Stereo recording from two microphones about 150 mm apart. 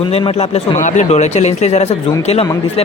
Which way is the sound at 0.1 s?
45° left (ahead or behind).